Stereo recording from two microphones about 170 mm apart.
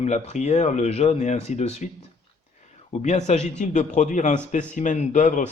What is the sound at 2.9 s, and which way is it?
A man's voice, 40° left (ahead or behind).